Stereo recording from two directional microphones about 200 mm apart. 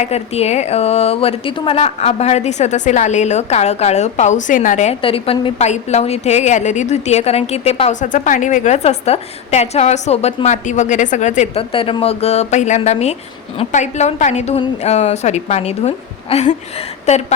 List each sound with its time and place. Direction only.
0.0 s speech: 30° left (ahead or behind)